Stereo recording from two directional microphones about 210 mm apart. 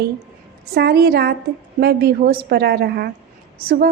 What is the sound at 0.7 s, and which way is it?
A woman's voice, 50° right (ahead or behind).